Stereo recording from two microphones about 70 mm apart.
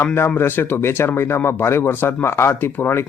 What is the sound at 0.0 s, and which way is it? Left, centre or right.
Speech, left.